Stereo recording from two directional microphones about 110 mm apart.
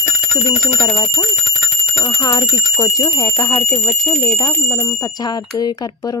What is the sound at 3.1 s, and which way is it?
Speech, 40° left (ahead or behind).